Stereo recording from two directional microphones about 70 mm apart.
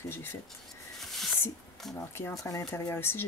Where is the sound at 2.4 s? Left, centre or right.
Left.